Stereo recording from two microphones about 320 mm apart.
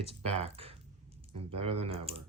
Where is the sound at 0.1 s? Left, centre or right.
Centre.